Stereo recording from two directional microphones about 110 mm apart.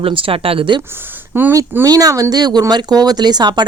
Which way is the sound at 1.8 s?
35° right (ahead or behind).